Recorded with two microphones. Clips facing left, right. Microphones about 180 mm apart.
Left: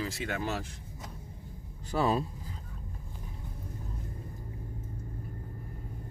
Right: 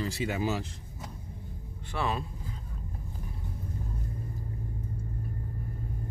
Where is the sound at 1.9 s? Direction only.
35° left (ahead or behind).